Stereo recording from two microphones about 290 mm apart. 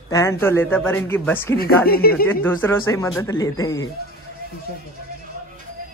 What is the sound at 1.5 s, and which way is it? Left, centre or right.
Speech, left.